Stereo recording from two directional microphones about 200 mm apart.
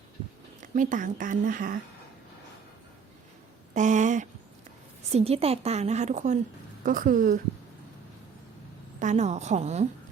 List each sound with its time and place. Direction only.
0.6 s a woman's voice: 40° right (ahead or behind)
3.8 s a sound: 40° right (ahead or behind)
5.1 s a woman's voice: 30° right (ahead or behind)
9.0 s a woman's voice: 35° right (ahead or behind)